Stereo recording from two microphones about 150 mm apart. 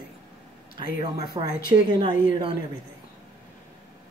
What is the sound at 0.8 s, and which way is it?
A woman's voice, 30° right (ahead or behind).